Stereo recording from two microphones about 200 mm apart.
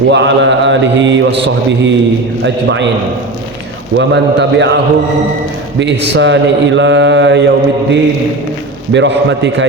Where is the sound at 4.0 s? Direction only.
60° right (ahead or behind).